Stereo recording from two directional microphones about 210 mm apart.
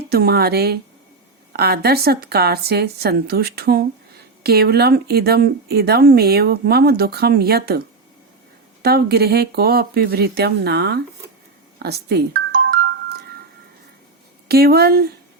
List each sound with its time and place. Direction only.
0.1 s speech: 50° right (ahead or behind)
8.8 s speech: 50° right (ahead or behind)
11.8 s music: 50° right (ahead or behind)
14.4 s speech: 45° right (ahead or behind)